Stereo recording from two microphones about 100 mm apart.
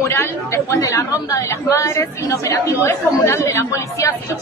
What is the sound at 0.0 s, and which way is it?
Speech, 30° left (ahead or behind).